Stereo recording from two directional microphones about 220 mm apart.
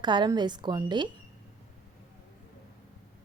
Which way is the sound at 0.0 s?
20° right (ahead or behind).